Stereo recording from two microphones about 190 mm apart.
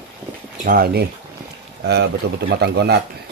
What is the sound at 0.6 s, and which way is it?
Speech, 50° right (ahead or behind).